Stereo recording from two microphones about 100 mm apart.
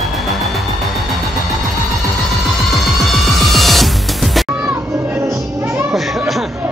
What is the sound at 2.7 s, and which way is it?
Music, centre (ahead or behind).